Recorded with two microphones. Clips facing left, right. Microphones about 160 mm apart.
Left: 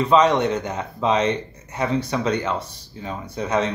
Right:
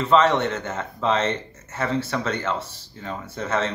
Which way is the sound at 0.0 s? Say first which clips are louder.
Left 2 dB; 15° left (ahead or behind).